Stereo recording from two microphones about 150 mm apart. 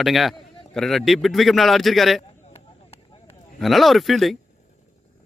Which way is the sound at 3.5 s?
Centre (ahead or behind).